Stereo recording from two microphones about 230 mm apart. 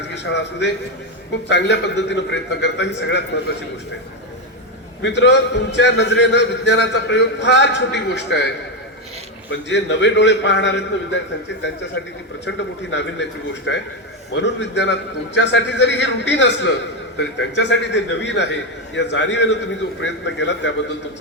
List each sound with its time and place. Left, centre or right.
0.1 s a man's voice: left
5.0 s a man's voice: left
9.5 s a man's voice: left
12.5 s a man's voice: left